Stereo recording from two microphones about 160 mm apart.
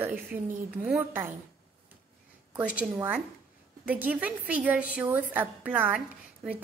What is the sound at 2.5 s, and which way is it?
A woman's voice, 10° right (ahead or behind).